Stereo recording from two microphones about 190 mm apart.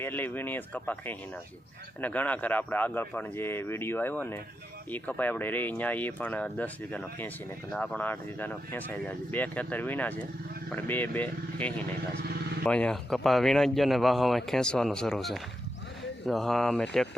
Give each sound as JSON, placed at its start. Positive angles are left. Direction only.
{"t": 0.0, "sound": "speech", "side_deg": 10}